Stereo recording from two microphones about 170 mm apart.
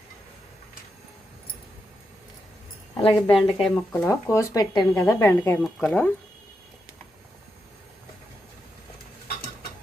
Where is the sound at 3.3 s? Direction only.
5° left (ahead or behind).